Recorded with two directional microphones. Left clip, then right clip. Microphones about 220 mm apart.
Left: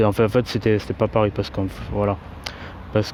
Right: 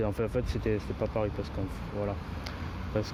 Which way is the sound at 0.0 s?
40° left (ahead or behind).